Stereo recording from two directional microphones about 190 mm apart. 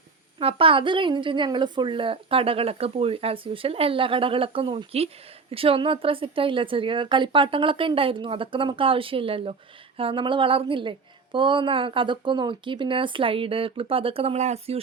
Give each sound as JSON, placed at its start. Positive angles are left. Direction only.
{"t": 0.3, "sound": "a woman's voice", "side_deg": -30}